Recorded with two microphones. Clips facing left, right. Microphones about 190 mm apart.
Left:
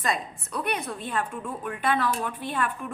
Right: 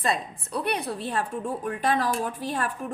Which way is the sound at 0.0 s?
35° right (ahead or behind).